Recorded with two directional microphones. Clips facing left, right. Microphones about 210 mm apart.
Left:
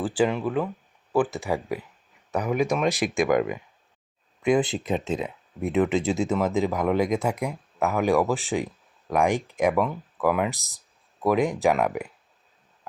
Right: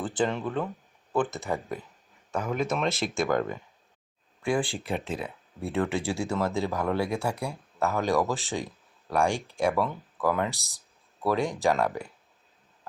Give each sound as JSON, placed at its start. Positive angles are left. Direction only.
{"t": 0.0, "sound": "speech", "side_deg": 10}